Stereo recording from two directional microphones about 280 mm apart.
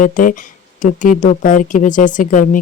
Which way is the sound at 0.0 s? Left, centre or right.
Left.